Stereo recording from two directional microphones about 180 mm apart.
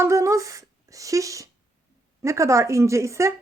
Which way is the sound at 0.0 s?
15° right (ahead or behind).